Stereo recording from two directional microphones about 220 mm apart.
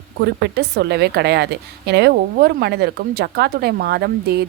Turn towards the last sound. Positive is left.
turn(degrees=-50)  # may be behind; listen again after turning